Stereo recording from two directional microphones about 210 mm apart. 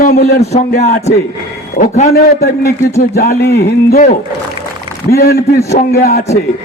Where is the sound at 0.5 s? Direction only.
35° left (ahead or behind).